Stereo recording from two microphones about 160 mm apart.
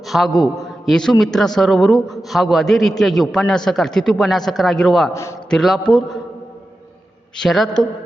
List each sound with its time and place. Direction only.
0.1 s a man's voice: centre (ahead or behind)
5.1 s a man's voice: 20° left (ahead or behind)
5.5 s a man's voice: centre (ahead or behind)
7.3 s a man's voice: centre (ahead or behind)